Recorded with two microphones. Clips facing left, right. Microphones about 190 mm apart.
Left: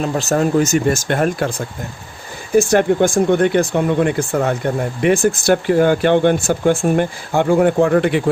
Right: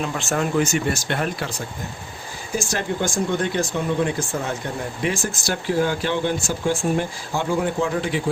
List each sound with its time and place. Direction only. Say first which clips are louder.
0.0 s speech: left 7 dB; 40° left (ahead or behind); by 8.2 s 60° left (ahead or behind)